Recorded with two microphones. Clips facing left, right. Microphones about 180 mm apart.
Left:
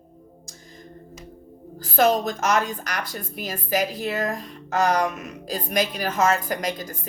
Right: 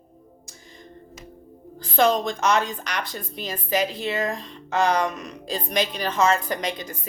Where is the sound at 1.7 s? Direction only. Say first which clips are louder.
Left 1 dB; 5° left (ahead or behind).